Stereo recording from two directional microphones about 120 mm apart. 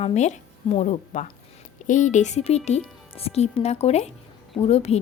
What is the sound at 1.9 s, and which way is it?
A woman's voice, 90° left.